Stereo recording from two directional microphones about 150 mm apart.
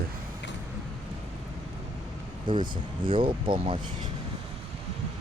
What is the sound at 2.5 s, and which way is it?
Speech, 30° right (ahead or behind).